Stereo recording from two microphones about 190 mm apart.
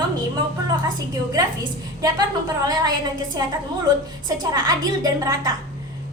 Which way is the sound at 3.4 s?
20° right (ahead or behind).